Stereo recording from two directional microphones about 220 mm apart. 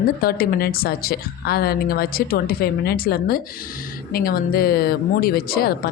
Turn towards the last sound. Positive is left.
turn(degrees=45)  # may be behind; listen again after turning